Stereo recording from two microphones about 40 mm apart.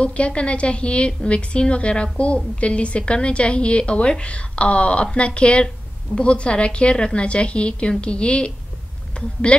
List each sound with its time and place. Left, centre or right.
0.0 s a woman's voice: left